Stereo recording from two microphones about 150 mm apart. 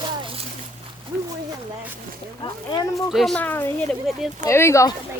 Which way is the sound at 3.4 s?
15° left (ahead or behind).